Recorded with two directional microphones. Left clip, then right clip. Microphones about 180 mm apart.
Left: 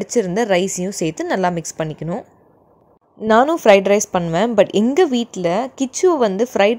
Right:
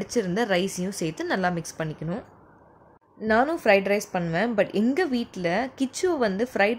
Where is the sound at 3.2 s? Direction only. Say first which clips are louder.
Left 9 dB; 40° left (ahead or behind).